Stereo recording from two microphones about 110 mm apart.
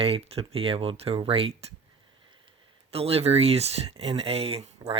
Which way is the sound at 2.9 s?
65° right (ahead or behind).